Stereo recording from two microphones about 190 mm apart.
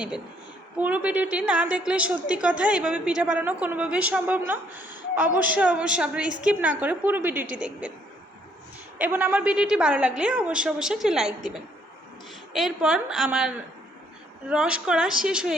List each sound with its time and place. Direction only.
0.8 s a woman's voice: 10° right (ahead or behind)
9.0 s a woman's voice: 10° right (ahead or behind)
12.5 s a woman's voice: 5° right (ahead or behind)